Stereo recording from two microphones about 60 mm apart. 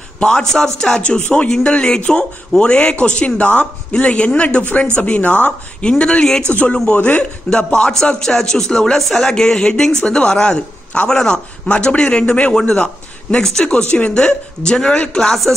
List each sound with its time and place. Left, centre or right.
0.2 s speech: centre